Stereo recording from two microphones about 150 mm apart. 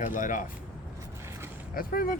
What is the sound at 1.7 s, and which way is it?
Speech, 75° left (ahead or behind).